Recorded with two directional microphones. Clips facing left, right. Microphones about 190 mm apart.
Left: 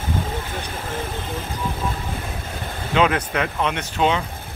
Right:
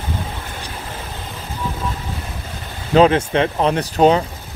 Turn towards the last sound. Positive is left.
turn(degrees=-40)  # may be behind; listen again after turning